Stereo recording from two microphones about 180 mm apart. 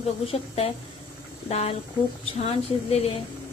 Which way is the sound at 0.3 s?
35° left (ahead or behind).